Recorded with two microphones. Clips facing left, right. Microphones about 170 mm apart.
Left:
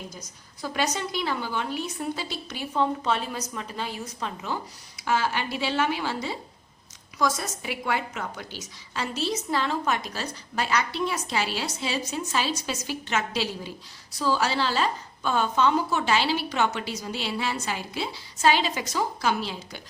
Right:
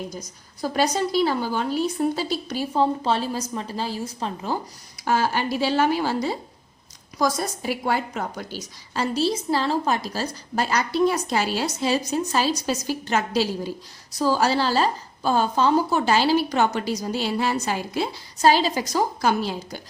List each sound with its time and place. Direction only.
0.6 s a woman's voice: 40° right (ahead or behind)